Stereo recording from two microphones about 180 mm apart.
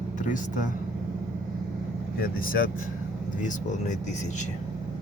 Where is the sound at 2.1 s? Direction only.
55° left (ahead or behind).